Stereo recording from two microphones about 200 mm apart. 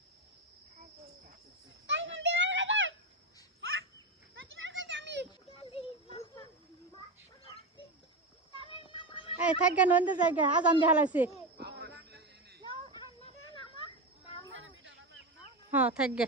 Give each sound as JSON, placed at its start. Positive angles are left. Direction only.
{"t": 1.9, "sound": "children playing", "side_deg": -65}
{"t": 3.6, "sound": "bird", "side_deg": -80}
{"t": 4.5, "sound": "children playing", "side_deg": -70}
{"t": 5.5, "sound": "a sound", "side_deg": 25}
{"t": 8.6, "sound": "music", "side_deg": 25}
{"t": 9.4, "sound": "speech", "side_deg": -5}
{"t": 11.5, "sound": "a sound", "side_deg": -55}
{"t": 14.5, "sound": "a sound", "side_deg": -75}
{"t": 15.7, "sound": "speech", "side_deg": -5}